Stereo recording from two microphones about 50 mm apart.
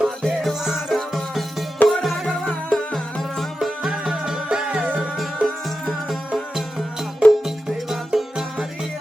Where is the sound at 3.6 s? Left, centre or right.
Centre.